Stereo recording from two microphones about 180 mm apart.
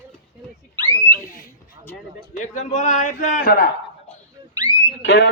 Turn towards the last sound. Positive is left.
turn(degrees=80)